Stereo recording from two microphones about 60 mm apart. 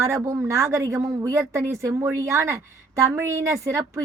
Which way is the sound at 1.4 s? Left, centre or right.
Right.